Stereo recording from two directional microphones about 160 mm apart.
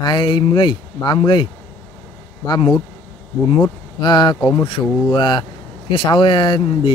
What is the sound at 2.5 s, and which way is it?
Speech, 30° left (ahead or behind).